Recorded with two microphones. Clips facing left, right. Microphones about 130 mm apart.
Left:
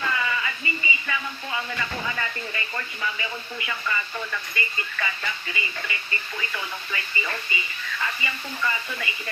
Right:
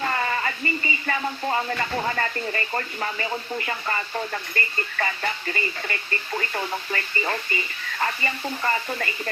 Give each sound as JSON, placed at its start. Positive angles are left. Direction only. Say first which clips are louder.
{"t": 0.0, "sound": "speech", "louder": "right 2 dB", "side_deg": -45}